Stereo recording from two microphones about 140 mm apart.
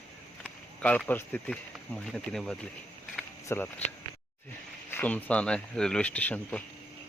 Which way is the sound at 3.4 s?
15° left (ahead or behind).